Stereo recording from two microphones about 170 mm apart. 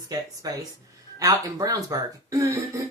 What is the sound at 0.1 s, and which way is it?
Speech, 20° right (ahead or behind).